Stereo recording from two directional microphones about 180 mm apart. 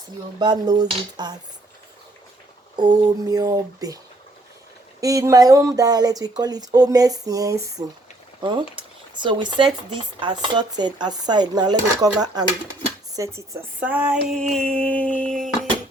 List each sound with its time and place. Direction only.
0.3 s speech: 25° right (ahead or behind)
2.7 s speech: 20° right (ahead or behind)
4.9 s speech: 20° right (ahead or behind)
14.3 s a sound: 5° left (ahead or behind)